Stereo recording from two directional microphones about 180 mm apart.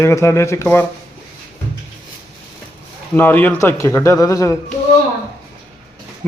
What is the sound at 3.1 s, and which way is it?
A man's voice, 10° left (ahead or behind).